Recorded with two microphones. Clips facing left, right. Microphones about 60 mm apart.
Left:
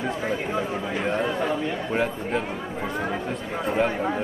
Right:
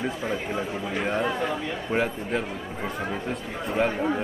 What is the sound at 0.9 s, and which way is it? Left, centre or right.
A man's voice, centre.